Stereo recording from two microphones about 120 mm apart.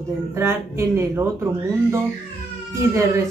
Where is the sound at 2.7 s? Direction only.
25° right (ahead or behind).